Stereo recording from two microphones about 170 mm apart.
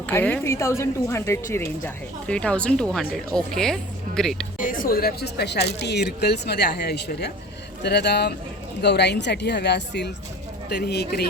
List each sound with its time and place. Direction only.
0.1 s a woman's voice: 15° left (ahead or behind)
4.5 s a woman's voice: 55° left (ahead or behind); by 10.1 s 90° left
10.7 s speech: 75° left (ahead or behind)